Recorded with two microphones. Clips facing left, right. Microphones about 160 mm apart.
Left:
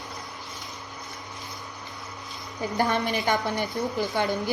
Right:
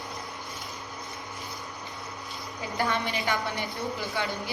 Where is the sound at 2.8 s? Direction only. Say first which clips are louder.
Left 3 dB; 50° left (ahead or behind).